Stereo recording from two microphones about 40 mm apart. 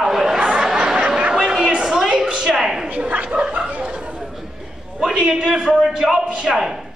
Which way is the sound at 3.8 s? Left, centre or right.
Right.